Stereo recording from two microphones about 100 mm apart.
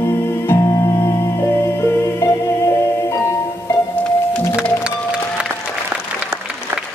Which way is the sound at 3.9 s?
15° left (ahead or behind).